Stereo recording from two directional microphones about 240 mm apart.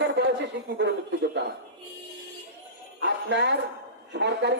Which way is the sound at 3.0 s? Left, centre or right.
Right.